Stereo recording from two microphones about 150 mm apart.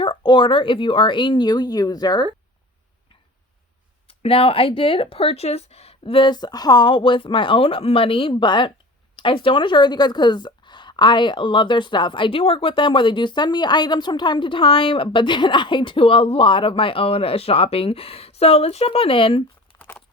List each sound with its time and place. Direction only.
0.0 s a woman's voice: 30° left (ahead or behind)
4.2 s a woman's voice: 40° left (ahead or behind)